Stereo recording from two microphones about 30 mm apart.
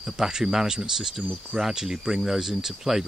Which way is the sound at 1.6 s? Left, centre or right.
Centre.